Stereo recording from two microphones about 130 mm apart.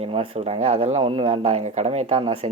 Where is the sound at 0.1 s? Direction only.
50° right (ahead or behind).